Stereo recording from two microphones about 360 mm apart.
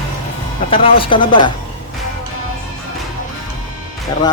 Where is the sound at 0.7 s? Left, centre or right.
Centre.